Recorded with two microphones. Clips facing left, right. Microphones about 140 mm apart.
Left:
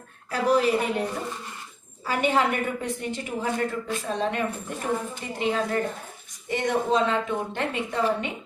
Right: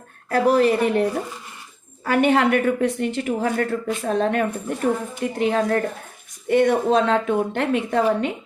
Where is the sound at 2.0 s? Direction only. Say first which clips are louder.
Right 6 dB; 60° right (ahead or behind).